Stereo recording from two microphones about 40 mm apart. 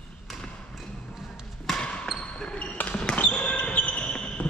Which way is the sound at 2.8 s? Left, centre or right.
Left.